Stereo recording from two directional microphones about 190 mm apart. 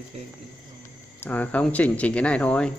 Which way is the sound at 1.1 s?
10° left (ahead or behind).